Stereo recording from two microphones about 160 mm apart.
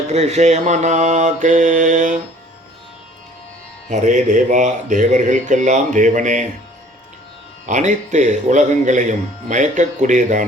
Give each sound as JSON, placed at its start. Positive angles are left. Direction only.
{"t": 0.1, "sound": "speech", "side_deg": -45}
{"t": 3.8, "sound": "speech", "side_deg": -50}
{"t": 7.7, "sound": "speech", "side_deg": -50}